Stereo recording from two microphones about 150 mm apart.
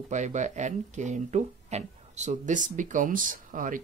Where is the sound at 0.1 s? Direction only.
50° right (ahead or behind).